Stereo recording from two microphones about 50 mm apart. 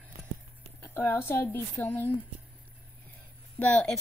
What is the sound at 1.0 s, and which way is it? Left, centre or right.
Speech, left.